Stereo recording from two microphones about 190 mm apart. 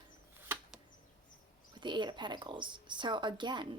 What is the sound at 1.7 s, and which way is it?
A woman's voice, 25° right (ahead or behind).